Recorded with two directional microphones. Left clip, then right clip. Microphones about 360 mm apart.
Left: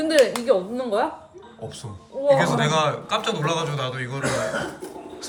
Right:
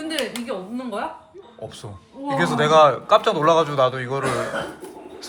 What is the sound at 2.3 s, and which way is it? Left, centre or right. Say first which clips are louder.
A man's voice: right 5 dB; centre.